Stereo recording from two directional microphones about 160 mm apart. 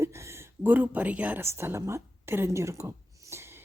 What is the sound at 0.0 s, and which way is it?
Speech, 15° right (ahead or behind).